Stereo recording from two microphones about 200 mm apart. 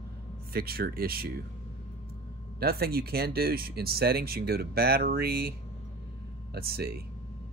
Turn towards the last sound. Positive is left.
turn(degrees=-50)  # may be behind; listen again after turning